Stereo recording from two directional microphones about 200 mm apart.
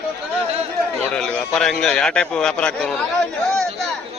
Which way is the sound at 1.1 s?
5° left (ahead or behind).